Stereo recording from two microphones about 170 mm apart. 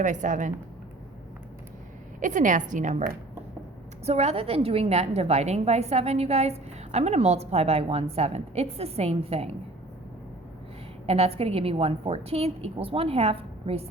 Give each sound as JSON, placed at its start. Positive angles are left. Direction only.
{"t": 0.0, "sound": "a woman's voice", "side_deg": -45}
{"t": 2.2, "sound": "a woman's voice", "side_deg": -50}
{"t": 4.0, "sound": "a woman's voice", "side_deg": -40}
{"t": 11.0, "sound": "a woman's voice", "side_deg": -35}